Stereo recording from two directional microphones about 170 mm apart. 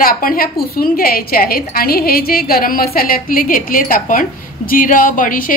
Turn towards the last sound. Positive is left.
turn(degrees=55)  # may be behind; listen again after turning